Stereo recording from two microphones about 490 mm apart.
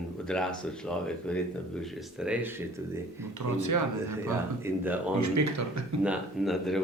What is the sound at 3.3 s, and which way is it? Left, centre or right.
Speech, right.